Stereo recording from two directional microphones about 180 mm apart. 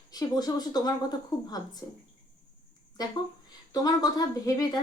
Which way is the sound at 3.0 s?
20° left (ahead or behind).